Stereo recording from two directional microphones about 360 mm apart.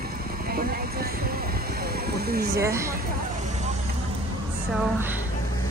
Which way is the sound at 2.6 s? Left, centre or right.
Centre.